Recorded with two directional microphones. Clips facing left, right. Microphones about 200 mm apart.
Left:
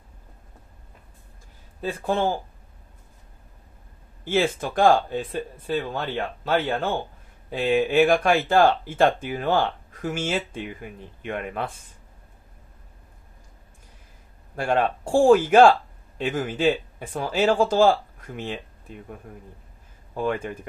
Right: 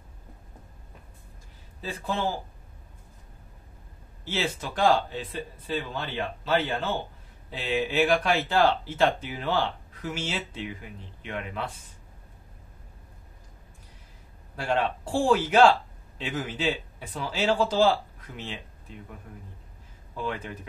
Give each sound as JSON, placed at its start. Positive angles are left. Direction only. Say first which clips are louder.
{"t": 1.8, "sound": "speech", "louder": "left 6 dB", "side_deg": 50}
{"t": 4.2, "sound": "speech", "louder": "left 8 dB", "side_deg": 50}
{"t": 14.6, "sound": "speech", "louder": "left 4 dB", "side_deg": 50}
{"t": 20.2, "sound": "speech", "louder": "left 7 dB", "side_deg": 50}